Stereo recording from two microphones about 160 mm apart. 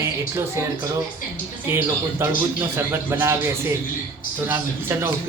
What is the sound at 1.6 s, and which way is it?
Speech, 15° right (ahead or behind).